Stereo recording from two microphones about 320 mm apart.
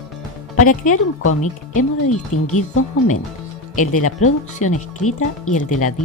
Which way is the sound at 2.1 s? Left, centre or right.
Left.